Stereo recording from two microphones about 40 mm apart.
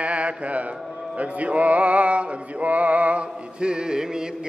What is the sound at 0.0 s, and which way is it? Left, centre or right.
Speech, right.